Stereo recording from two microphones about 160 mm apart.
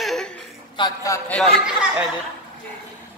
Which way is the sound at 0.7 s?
25° left (ahead or behind).